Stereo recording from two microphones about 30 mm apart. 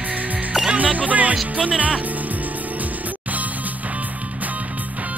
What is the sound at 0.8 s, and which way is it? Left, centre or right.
Music, right.